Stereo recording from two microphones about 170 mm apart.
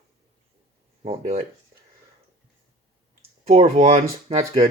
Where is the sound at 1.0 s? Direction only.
40° right (ahead or behind).